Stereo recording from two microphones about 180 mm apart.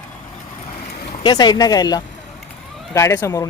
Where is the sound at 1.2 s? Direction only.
25° left (ahead or behind).